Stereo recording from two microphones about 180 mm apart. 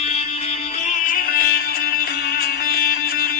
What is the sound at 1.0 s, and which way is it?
Music, 55° left (ahead or behind).